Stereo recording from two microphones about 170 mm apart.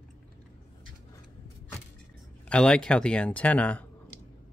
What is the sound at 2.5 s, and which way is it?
Speech, 5° left (ahead or behind).